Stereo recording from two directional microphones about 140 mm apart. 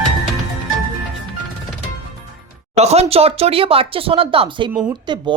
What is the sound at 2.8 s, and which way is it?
Speech, 50° right (ahead or behind).